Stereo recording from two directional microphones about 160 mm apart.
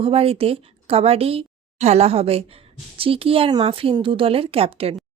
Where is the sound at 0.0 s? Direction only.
35° right (ahead or behind).